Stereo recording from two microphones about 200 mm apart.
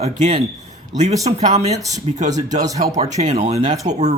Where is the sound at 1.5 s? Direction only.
35° right (ahead or behind).